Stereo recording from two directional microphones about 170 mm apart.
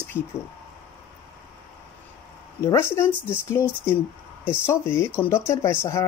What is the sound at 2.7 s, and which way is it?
Speech, 15° left (ahead or behind).